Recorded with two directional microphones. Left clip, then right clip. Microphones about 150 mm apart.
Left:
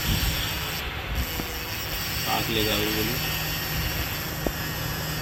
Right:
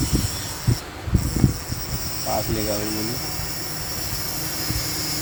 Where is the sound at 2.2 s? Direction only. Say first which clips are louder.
Right 1 dB; 20° right (ahead or behind).